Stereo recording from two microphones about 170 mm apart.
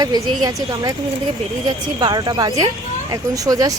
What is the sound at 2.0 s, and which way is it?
Speech, 25° right (ahead or behind).